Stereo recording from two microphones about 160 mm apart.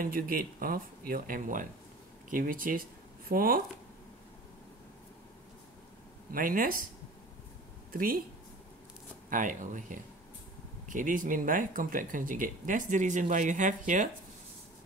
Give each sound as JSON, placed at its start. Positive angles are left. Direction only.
{"t": 0.0, "sound": "speech", "side_deg": -65}
{"t": 6.3, "sound": "speech", "side_deg": -60}
{"t": 7.9, "sound": "speech", "side_deg": -60}
{"t": 9.3, "sound": "speech", "side_deg": -55}